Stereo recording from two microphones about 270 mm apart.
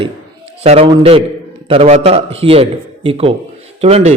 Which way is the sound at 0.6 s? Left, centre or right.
Right.